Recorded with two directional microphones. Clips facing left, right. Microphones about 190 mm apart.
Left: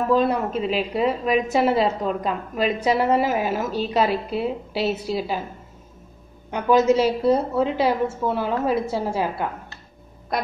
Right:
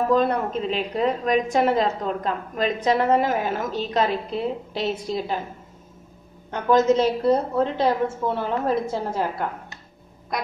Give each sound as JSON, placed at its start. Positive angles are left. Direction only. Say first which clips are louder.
{"t": 0.1, "sound": "a woman's voice", "louder": "left 4 dB", "side_deg": 5}
{"t": 6.5, "sound": "a woman's voice", "louder": "left 1 dB", "side_deg": 10}